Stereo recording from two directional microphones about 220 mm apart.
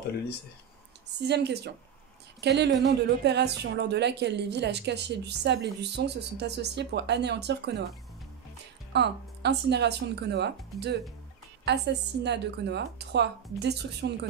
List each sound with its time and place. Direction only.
1.2 s a woman's voice: 50° right (ahead or behind)
8.9 s a woman's voice: 50° right (ahead or behind)